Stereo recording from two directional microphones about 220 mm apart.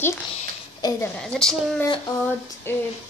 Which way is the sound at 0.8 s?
5° left (ahead or behind).